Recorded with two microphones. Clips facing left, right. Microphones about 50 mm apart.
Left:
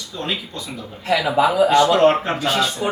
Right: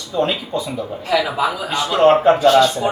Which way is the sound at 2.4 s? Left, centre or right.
Centre.